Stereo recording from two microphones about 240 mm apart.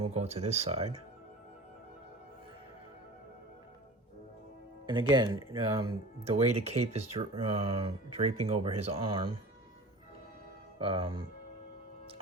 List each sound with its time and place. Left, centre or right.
0.0 s speech: right
4.9 s speech: centre
10.8 s speech: right